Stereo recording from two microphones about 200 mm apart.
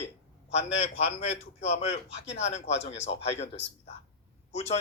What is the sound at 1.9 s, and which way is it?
Speech, 65° left (ahead or behind).